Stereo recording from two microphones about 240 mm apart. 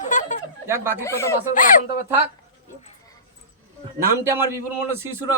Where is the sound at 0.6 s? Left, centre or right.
Centre.